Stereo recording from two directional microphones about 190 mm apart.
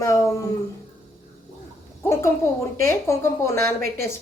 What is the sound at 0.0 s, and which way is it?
Speech, 15° left (ahead or behind).